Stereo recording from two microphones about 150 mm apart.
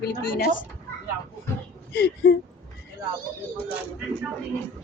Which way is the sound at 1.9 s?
90° left.